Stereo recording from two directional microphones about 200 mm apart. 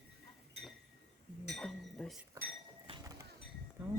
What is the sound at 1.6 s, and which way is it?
Speech, centre (ahead or behind).